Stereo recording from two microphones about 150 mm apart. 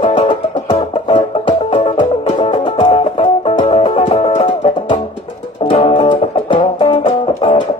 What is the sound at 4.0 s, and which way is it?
Music, 50° left (ahead or behind).